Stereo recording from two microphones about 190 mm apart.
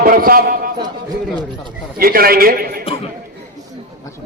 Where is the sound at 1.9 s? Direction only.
50° right (ahead or behind).